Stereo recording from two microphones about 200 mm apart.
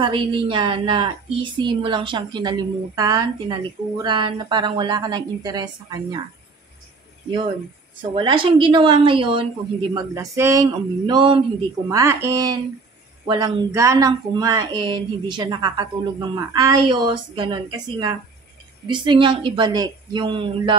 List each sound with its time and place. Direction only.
0.0 s a woman's voice: 25° right (ahead or behind)
8.0 s a woman's voice: 25° right (ahead or behind)